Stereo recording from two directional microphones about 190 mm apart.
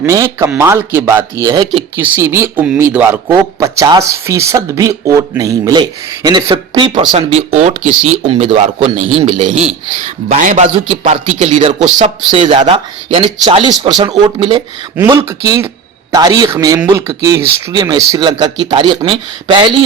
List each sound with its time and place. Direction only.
0.0 s speech: 15° right (ahead or behind)
2.0 s a man's voice: 10° right (ahead or behind)